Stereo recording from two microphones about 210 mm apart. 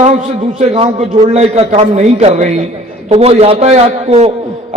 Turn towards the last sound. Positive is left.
turn(degrees=-30)  # may be behind; listen again after turning